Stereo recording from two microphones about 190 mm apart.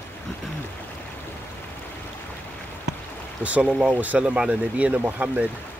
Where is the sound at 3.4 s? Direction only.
5° right (ahead or behind).